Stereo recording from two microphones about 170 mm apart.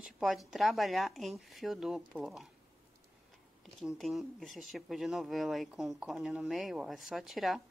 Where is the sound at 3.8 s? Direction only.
Centre (ahead or behind).